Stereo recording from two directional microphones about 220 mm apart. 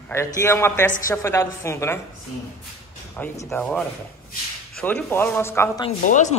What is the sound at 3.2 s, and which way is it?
Speech, 5° left (ahead or behind).